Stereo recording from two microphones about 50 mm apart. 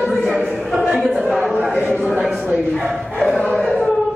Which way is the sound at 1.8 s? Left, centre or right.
Right.